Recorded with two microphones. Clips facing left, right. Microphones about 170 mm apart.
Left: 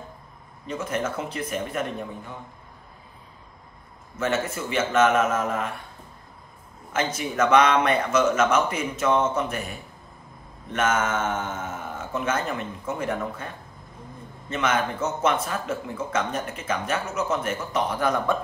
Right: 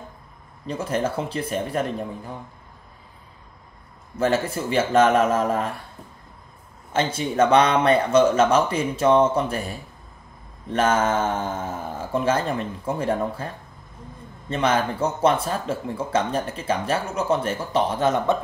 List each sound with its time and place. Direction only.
0.7 s speech: 30° right (ahead or behind)
4.2 s speech: 35° right (ahead or behind)
6.9 s speech: 30° right (ahead or behind)
14.5 s speech: 30° right (ahead or behind)